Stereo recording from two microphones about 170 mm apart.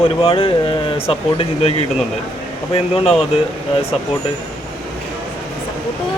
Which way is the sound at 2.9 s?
35° left (ahead or behind).